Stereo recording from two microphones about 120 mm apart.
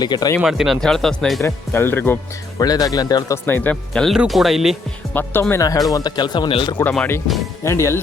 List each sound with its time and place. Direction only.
0.0 s speech: 35° left (ahead or behind)
0.3 s speech: 5° right (ahead or behind)
1.5 s speech: 20° left (ahead or behind)
2.6 s speech: 30° left (ahead or behind)
3.3 s speech: 15° left (ahead or behind)
4.0 s speech: centre (ahead or behind)
5.1 s speech: 20° left (ahead or behind); by 6.5 s 35° left (ahead or behind)
6.8 s speech: 20° left (ahead or behind)